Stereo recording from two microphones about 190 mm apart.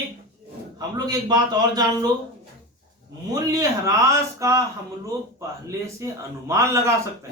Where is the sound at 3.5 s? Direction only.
15° right (ahead or behind).